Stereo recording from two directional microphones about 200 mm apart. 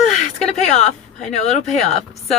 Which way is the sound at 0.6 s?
35° left (ahead or behind).